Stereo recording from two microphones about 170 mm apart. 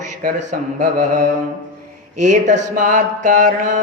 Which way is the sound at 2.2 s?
45° right (ahead or behind).